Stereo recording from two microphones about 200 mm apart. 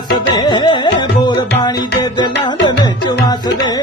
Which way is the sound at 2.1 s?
20° left (ahead or behind).